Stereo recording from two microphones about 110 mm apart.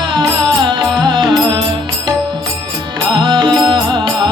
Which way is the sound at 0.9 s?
45° right (ahead or behind).